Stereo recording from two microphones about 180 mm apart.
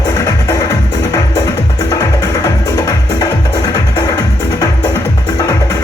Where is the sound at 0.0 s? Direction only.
20° left (ahead or behind).